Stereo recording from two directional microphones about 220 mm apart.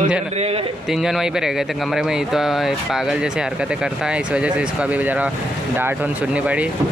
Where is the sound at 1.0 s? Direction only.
Centre (ahead or behind).